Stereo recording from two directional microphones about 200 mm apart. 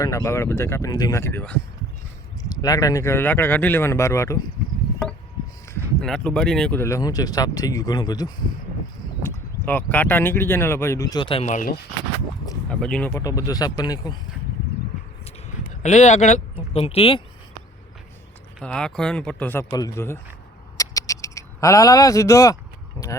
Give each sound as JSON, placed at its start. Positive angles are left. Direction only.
{"t": 0.0, "sound": "speech", "side_deg": 15}
{"t": 5.7, "sound": "speech", "side_deg": 5}
{"t": 12.6, "sound": "speech", "side_deg": 5}
{"t": 15.4, "sound": "speech", "side_deg": 35}
{"t": 18.6, "sound": "speech", "side_deg": 5}
{"t": 20.7, "sound": "a sound", "side_deg": 15}